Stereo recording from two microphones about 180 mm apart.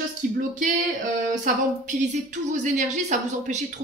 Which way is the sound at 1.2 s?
45° right (ahead or behind).